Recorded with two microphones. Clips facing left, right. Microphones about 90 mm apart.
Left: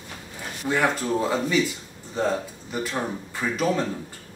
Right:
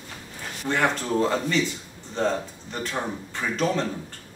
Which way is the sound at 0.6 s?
5° left (ahead or behind).